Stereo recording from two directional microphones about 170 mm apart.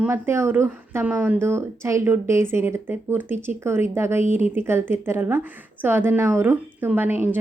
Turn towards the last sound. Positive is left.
turn(degrees=-10)  # may be behind; listen again after turning